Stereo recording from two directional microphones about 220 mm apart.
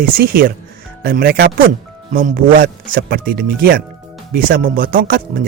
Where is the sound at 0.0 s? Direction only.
40° right (ahead or behind).